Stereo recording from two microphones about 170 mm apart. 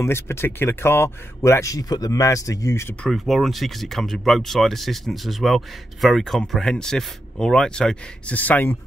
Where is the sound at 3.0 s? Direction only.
Centre (ahead or behind).